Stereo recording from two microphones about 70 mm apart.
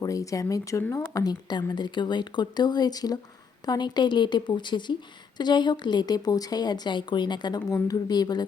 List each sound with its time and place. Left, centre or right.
0.0 s speech: left
0.9 s a woman's voice: left
3.7 s a woman's voice: left
7.9 s speech: left